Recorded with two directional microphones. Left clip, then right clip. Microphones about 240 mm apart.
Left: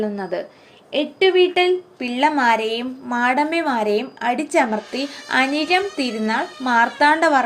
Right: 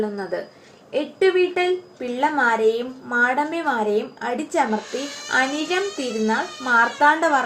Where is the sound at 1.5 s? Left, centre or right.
Left.